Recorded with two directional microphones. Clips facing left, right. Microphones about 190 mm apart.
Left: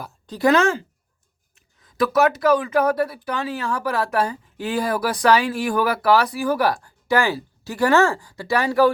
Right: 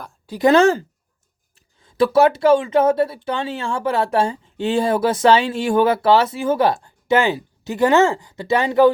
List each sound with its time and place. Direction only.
0.3 s speech: 15° right (ahead or behind)
0.5 s speech: 35° right (ahead or behind)